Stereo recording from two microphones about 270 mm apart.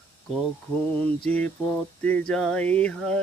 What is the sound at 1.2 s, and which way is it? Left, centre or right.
Speech, centre.